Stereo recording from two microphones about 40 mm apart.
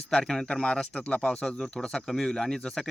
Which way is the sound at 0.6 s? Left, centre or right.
Left.